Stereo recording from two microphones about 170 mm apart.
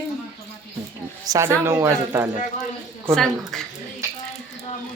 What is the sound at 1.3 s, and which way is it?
Speech, 15° right (ahead or behind).